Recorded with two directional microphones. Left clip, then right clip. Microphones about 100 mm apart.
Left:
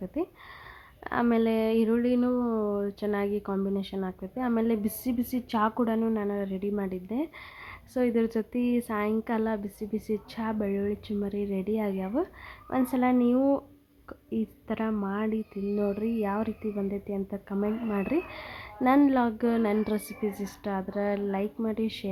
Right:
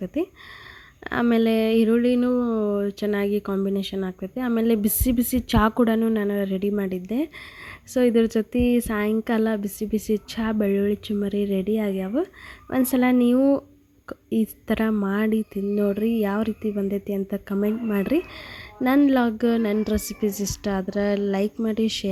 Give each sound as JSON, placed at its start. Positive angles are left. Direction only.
{"t": 0.0, "sound": "speech", "side_deg": -35}
{"t": 12.7, "sound": "a woman's voice", "side_deg": -40}
{"t": 15.7, "sound": "speech", "side_deg": -35}